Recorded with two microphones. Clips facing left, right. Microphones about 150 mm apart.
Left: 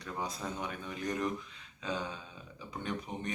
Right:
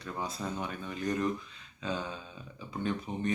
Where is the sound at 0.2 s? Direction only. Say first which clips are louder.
Right 2 dB; 15° left (ahead or behind).